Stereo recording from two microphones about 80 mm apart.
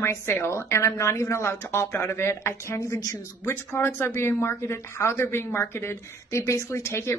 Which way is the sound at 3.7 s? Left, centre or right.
Left.